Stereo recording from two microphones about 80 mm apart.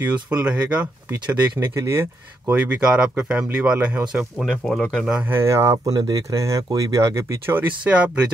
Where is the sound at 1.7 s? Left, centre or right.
Right.